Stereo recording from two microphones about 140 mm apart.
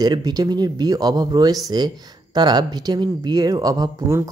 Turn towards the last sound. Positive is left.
turn(degrees=-20)  # may be behind; listen again after turning